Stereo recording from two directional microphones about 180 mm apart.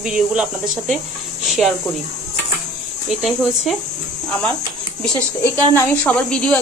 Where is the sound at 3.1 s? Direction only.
Centre (ahead or behind).